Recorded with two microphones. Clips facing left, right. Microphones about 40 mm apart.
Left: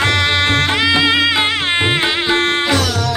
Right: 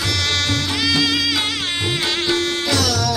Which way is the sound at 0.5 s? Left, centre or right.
Left.